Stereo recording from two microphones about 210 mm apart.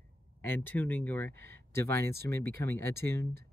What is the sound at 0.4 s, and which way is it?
Speech, 10° left (ahead or behind).